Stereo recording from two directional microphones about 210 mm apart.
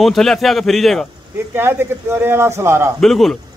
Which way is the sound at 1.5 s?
10° right (ahead or behind).